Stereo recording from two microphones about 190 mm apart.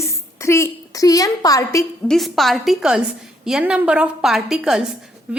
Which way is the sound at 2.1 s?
Centre (ahead or behind).